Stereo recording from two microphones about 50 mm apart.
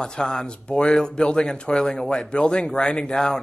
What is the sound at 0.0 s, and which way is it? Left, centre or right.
Speech, centre.